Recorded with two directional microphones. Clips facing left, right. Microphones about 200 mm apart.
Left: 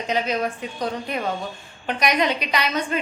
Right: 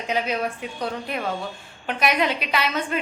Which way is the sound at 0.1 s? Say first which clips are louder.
Left 1 dB; 10° right (ahead or behind).